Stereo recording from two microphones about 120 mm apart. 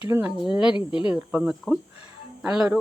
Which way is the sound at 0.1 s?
20° right (ahead or behind).